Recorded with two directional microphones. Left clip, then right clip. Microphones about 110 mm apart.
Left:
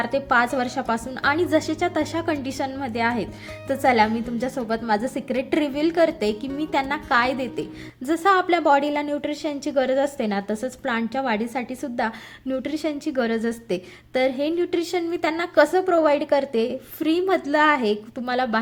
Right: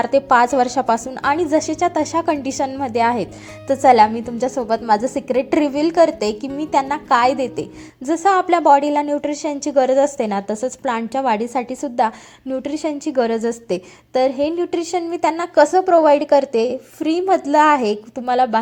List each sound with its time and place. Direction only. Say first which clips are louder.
0.0 s a woman's voice: right 6 dB; 40° right (ahead or behind)
1.1 s a woman's voice: right 3 dB; 30° right (ahead or behind)
6.6 s a woman's voice: right 7 dB; 20° right (ahead or behind)
9.3 s a woman's voice: right 6 dB; 30° right (ahead or behind)
12.5 s a woman's voice: right 4 dB; 10° right (ahead or behind); by 13.8 s 30° right (ahead or behind)
14.1 s a woman's voice: right 5 dB; 20° right (ahead or behind)
17.0 s a woman's voice: right 4 dB; 15° right (ahead or behind); by 17.9 s 35° right (ahead or behind)
18.3 s a woman's voice: right 7 dB; 20° right (ahead or behind)